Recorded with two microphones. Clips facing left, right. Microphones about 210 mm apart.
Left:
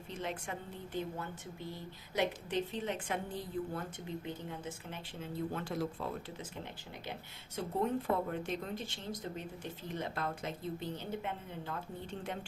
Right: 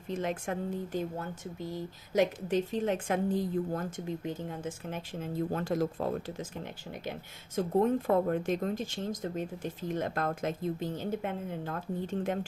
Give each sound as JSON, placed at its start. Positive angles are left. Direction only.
{"t": 0.2, "sound": "speech", "side_deg": -45}